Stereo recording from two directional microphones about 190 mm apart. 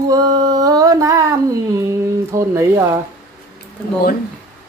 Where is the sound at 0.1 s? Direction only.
20° right (ahead or behind).